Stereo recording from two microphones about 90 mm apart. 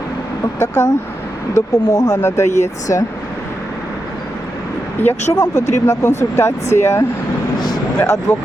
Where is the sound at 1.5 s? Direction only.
40° left (ahead or behind).